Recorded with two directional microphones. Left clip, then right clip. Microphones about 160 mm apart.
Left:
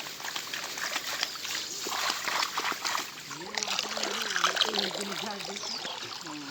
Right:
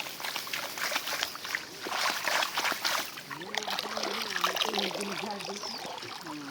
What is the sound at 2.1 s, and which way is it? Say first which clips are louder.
Trickle: right 2 dB; 40° right (ahead or behind).